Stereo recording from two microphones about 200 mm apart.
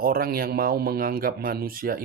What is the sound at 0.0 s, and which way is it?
Speech, 45° right (ahead or behind).